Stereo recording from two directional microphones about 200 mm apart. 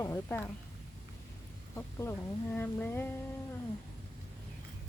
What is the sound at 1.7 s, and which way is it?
Speech, 10° left (ahead or behind).